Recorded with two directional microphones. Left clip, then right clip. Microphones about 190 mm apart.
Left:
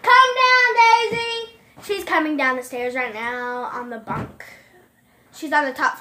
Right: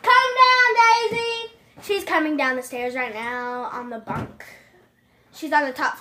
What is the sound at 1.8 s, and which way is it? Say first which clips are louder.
A woman's voice: left 1 dB; 10° right (ahead or behind).